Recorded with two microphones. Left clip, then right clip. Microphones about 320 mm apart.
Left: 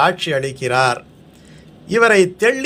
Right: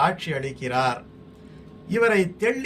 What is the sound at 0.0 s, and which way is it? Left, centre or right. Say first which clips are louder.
A man's voice: left 7 dB; centre.